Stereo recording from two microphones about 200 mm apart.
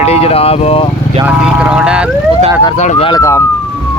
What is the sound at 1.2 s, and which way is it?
Vehicle, 5° right (ahead or behind).